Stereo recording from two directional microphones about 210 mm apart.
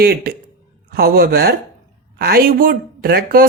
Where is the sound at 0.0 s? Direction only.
45° right (ahead or behind).